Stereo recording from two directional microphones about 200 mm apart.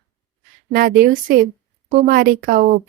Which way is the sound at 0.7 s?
45° right (ahead or behind).